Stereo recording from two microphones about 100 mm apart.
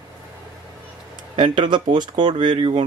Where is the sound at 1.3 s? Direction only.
55° right (ahead or behind).